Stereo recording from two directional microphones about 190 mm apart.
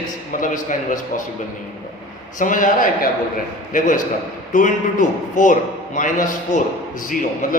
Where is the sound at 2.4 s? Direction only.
45° left (ahead or behind).